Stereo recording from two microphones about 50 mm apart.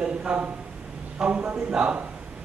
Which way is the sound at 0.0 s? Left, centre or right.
Centre.